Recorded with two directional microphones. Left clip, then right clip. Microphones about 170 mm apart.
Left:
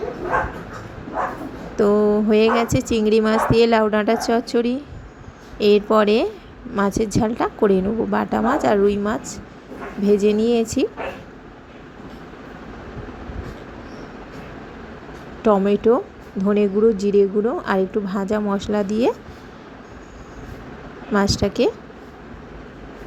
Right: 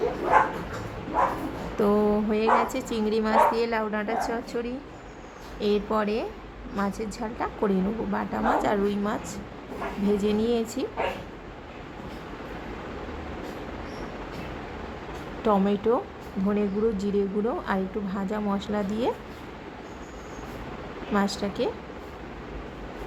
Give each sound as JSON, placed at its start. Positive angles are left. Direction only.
{"t": 1.7, "sound": "a sound", "side_deg": 20}
{"t": 2.3, "sound": "a woman's voice", "side_deg": 35}
{"t": 15.4, "sound": "a woman's voice", "side_deg": 25}
{"t": 21.1, "sound": "a woman's voice", "side_deg": 30}